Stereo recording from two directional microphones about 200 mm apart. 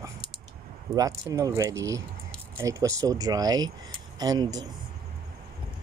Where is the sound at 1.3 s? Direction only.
15° right (ahead or behind).